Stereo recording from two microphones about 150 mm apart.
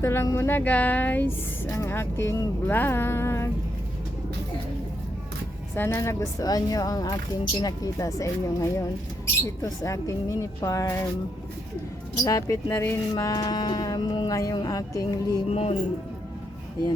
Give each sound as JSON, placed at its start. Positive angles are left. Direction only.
{"t": 0.0, "sound": "speech", "side_deg": 15}
{"t": 5.7, "sound": "speech", "side_deg": 15}
{"t": 12.2, "sound": "speech", "side_deg": 25}
{"t": 15.4, "sound": "speech", "side_deg": 45}